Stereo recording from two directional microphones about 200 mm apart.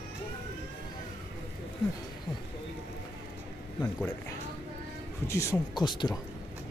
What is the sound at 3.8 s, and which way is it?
Speech, 10° left (ahead or behind).